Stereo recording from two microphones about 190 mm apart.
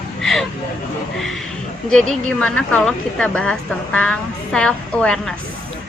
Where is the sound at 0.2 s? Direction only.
Centre (ahead or behind).